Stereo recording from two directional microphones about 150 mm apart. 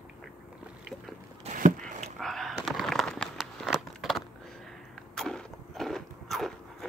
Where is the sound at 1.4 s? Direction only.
55° right (ahead or behind).